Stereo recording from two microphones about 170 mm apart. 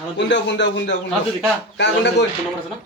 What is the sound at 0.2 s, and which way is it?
Speech, 90° left.